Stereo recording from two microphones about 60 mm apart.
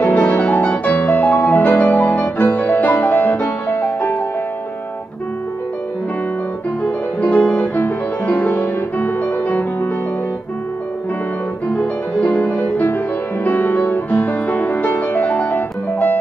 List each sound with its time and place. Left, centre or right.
0.0 s music: left
6.8 s music: centre
11.7 s music: left